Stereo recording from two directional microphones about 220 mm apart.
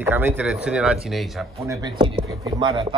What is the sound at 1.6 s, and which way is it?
A man's voice, 15° right (ahead or behind).